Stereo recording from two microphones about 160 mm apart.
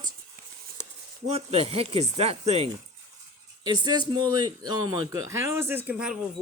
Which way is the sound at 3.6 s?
25° right (ahead or behind).